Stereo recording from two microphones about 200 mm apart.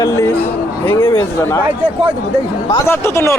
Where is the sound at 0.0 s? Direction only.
15° left (ahead or behind).